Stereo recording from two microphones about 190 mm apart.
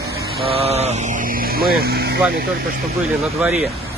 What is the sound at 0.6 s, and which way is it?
Speech, 35° right (ahead or behind).